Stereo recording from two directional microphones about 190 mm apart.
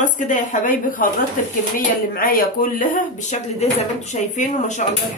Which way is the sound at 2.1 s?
50° left (ahead or behind).